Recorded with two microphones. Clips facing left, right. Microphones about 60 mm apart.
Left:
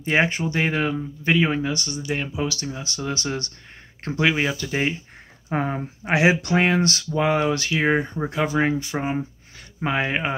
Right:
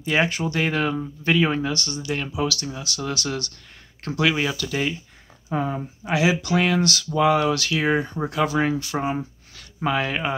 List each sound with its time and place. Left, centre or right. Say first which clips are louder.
0.0 s speech: left 1 dB; left
5.5 s speech: left 1 dB; left